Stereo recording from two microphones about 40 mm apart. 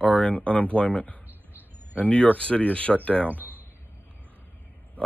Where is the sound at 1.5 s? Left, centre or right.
Right.